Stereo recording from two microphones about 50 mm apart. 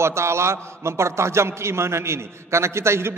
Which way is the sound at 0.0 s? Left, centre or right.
Right.